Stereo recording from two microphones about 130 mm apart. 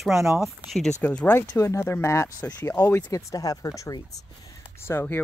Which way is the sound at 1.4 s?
25° left (ahead or behind).